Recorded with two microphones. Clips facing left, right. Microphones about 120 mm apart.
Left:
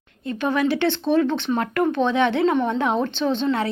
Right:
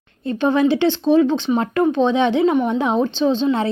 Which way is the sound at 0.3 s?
25° right (ahead or behind).